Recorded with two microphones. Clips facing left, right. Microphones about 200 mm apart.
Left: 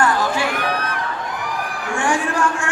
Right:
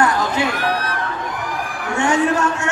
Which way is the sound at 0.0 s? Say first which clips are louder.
Right 1 dB; 20° right (ahead or behind).